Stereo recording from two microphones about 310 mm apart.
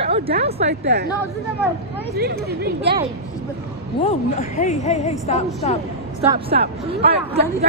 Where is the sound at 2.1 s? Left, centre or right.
Right.